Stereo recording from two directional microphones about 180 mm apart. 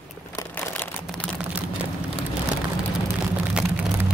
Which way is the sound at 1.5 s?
10° right (ahead or behind).